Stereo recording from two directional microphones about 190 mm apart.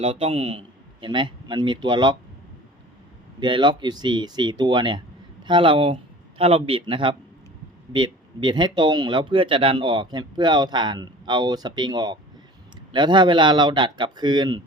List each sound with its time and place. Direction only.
0.0 s a man's voice: 30° right (ahead or behind)
3.4 s speech: 25° right (ahead or behind)